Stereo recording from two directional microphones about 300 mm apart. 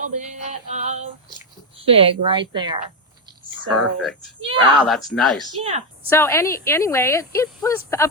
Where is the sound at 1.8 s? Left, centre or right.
Centre.